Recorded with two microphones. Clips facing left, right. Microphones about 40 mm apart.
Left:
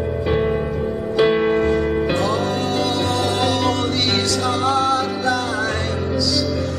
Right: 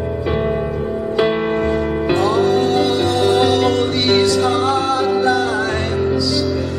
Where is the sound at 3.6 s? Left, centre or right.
Right.